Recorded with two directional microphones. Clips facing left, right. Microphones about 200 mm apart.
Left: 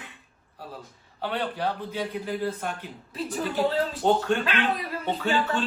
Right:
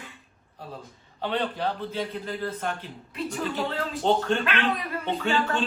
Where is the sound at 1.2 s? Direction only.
10° left (ahead or behind).